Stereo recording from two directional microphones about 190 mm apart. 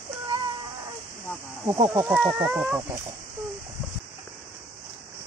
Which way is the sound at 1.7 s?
20° right (ahead or behind).